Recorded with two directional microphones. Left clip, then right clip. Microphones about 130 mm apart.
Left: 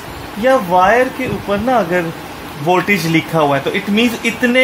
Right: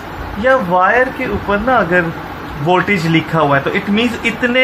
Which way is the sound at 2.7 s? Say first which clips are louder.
Even; 60° left (ahead or behind).